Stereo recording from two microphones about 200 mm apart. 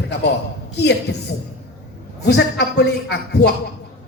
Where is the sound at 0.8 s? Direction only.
55° left (ahead or behind).